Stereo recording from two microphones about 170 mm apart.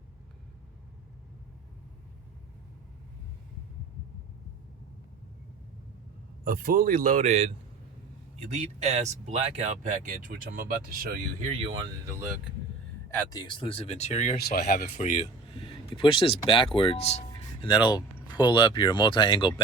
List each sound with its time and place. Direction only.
6.4 s speech: 60° right (ahead or behind)
12.0 s speech: 15° right (ahead or behind)
13.3 s speech: 25° left (ahead or behind); by 14.3 s 45° left (ahead or behind)
14.3 s speech: 65° left (ahead or behind)
14.7 s speech: 55° left (ahead or behind)
15.6 s speech: 30° left (ahead or behind)